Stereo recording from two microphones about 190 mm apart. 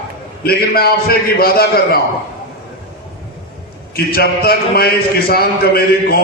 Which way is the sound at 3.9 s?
55° left (ahead or behind).